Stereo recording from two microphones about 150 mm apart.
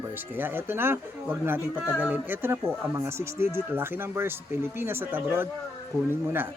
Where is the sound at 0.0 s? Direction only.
15° right (ahead or behind).